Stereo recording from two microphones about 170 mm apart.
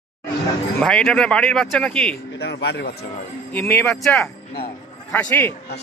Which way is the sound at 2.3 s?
75° left (ahead or behind).